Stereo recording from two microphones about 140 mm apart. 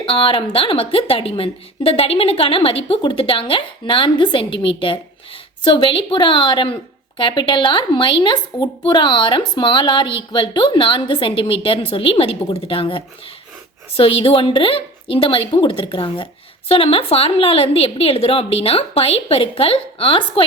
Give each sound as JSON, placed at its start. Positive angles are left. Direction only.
{"t": 0.0, "sound": "a woman's voice", "side_deg": 40}